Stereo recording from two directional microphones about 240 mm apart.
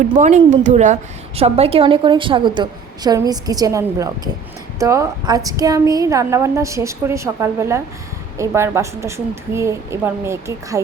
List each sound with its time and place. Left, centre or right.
0.0 s a woman's voice: right; by 10.8 s centre